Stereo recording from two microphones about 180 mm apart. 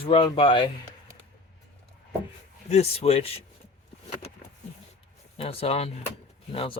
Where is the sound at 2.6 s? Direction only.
35° left (ahead or behind).